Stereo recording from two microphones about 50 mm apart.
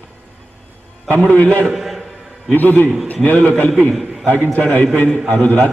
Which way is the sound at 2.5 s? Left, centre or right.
Left.